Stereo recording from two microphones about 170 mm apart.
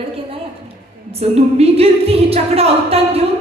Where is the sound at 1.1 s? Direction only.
35° right (ahead or behind).